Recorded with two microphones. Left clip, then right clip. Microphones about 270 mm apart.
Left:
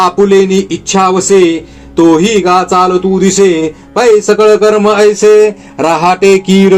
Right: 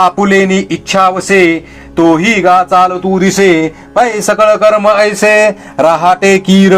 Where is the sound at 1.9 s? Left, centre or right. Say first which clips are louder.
Left 1 dB; right.